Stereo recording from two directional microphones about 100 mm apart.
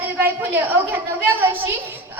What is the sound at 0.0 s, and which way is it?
Speech, 20° right (ahead or behind).